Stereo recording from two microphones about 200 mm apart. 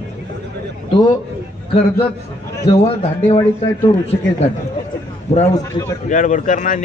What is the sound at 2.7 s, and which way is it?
Speech, 30° left (ahead or behind).